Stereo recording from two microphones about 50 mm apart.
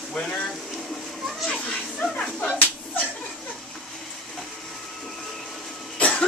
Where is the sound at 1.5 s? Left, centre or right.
Centre.